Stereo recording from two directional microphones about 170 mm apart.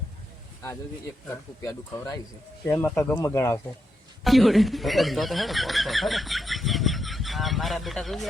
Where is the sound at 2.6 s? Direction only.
15° left (ahead or behind).